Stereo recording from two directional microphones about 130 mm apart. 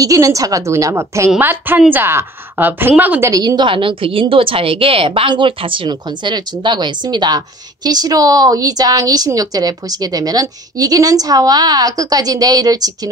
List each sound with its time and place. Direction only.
0.0 s a woman's voice: 25° right (ahead or behind)
3.3 s a woman's voice: 30° right (ahead or behind)